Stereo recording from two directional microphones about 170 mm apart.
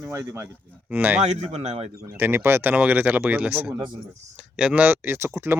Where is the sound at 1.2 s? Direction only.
40° right (ahead or behind).